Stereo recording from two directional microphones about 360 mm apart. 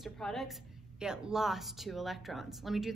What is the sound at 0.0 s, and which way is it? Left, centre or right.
A woman's voice, centre.